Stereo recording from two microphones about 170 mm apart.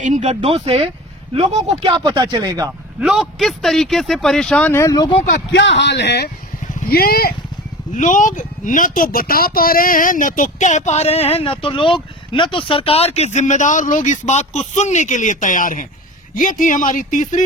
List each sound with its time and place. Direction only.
0.0 s speech: 45° right (ahead or behind); by 2.6 s 20° right (ahead or behind)
3.0 s speech: centre (ahead or behind); by 5.0 s 20° left (ahead or behind)
5.5 s a man's voice: 90° left
6.7 s speech: 60° left (ahead or behind)
7.9 s speech: 50° left (ahead or behind)